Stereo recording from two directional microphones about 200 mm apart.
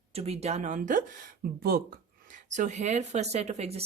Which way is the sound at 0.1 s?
30° right (ahead or behind).